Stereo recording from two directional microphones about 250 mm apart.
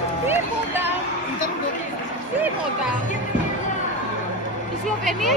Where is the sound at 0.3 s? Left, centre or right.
Centre.